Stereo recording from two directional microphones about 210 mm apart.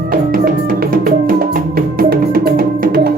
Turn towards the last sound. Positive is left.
turn(degrees=-45)  # may be behind; listen again after turning